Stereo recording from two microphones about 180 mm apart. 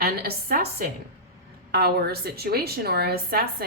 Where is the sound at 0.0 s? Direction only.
60° right (ahead or behind).